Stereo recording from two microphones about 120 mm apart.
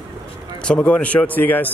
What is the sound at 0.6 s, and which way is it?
Speech, 10° left (ahead or behind).